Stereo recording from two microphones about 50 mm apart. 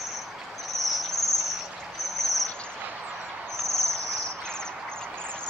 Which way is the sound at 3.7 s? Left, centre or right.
Right.